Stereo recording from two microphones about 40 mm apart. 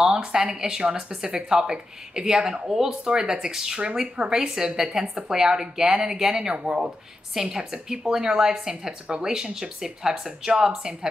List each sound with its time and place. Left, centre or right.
0.0 s speech: centre